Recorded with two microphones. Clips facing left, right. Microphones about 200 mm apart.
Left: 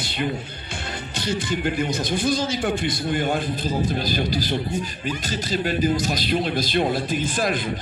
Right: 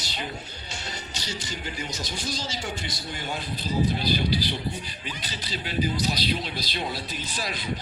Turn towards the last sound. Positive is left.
turn(degrees=50)  # may be behind; listen again after turning